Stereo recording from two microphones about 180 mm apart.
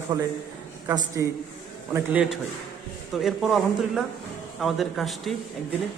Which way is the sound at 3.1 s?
Centre (ahead or behind).